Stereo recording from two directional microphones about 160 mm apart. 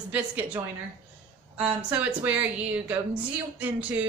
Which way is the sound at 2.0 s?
10° right (ahead or behind).